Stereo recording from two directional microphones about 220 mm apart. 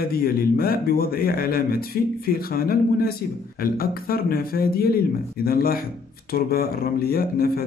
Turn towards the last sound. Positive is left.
turn(degrees=45)  # may be behind; listen again after turning